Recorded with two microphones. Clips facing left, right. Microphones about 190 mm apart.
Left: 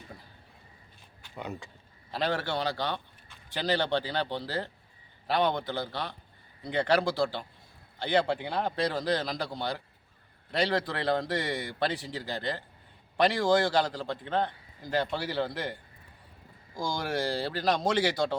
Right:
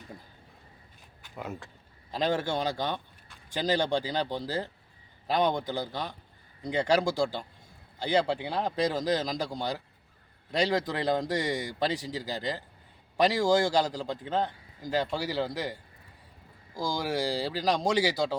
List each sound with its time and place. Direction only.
1.4 s speech: centre (ahead or behind)
2.1 s speech: 15° right (ahead or behind)
3.9 s speech: 10° right (ahead or behind)